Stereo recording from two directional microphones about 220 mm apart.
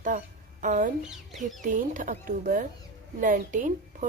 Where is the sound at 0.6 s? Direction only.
35° right (ahead or behind).